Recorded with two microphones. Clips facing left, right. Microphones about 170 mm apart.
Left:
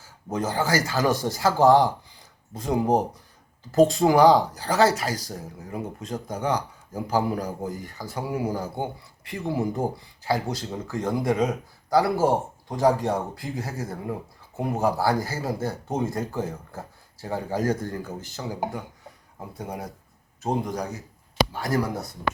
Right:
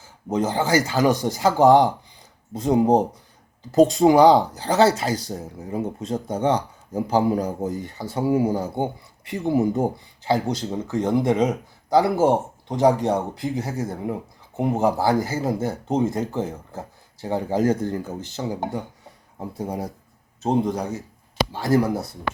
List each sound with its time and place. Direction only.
0.3 s speech: 20° right (ahead or behind)